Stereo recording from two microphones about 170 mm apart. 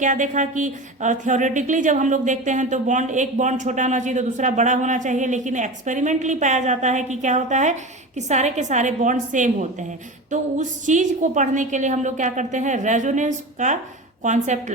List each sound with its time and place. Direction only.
0.0 s speech: 50° right (ahead or behind)